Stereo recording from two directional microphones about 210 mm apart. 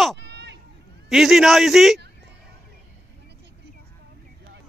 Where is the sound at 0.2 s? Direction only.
55° right (ahead or behind).